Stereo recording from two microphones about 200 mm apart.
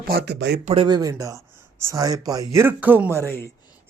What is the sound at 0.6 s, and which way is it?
Speech, 35° right (ahead or behind).